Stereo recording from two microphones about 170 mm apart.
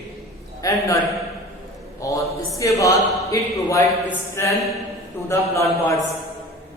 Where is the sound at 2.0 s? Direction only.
20° left (ahead or behind).